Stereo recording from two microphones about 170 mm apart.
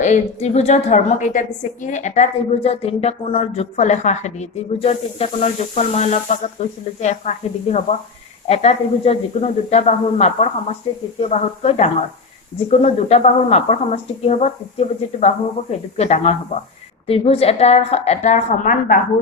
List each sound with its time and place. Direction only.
0.0 s a woman's voice: 45° left (ahead or behind)